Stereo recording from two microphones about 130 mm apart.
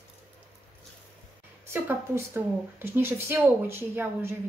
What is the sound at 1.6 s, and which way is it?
A woman's voice, 15° right (ahead or behind).